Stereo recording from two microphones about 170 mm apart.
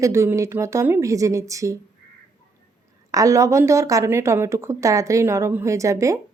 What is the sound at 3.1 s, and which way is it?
A woman's voice, 20° right (ahead or behind).